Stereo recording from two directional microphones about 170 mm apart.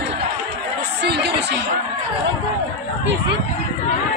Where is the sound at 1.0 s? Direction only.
75° right (ahead or behind).